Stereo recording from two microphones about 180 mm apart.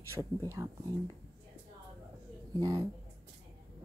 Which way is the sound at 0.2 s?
15° right (ahead or behind).